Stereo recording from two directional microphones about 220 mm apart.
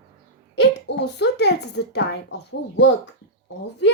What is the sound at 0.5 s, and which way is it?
A child's voice, 50° left (ahead or behind).